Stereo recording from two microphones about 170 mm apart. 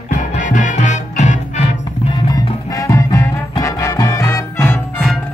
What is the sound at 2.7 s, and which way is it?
Music, 20° left (ahead or behind).